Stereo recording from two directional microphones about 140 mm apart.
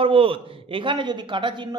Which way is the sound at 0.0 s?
40° right (ahead or behind).